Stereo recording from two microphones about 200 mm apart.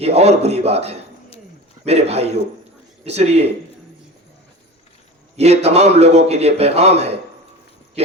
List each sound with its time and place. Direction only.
0.0 s a man's voice: 30° right (ahead or behind)
5.4 s a man's voice: 30° right (ahead or behind)